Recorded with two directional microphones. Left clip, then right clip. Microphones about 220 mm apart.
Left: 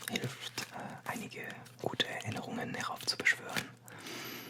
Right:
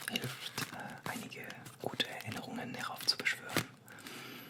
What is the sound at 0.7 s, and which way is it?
Whispering, 30° left (ahead or behind).